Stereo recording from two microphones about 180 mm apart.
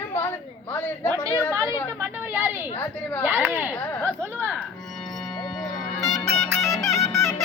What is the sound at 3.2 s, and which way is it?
Speech, 10° right (ahead or behind).